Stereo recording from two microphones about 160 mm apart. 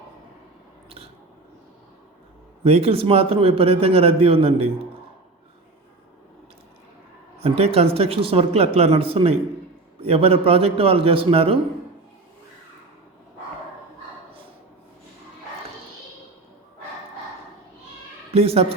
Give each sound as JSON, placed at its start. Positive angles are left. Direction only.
{"t": 2.6, "sound": "a man's voice", "side_deg": -40}
{"t": 7.3, "sound": "a man's voice", "side_deg": -40}
{"t": 18.3, "sound": "a woman's voice", "side_deg": -40}